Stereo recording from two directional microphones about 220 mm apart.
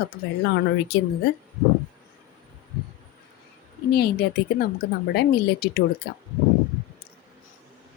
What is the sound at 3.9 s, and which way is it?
A woman's voice, 50° left (ahead or behind).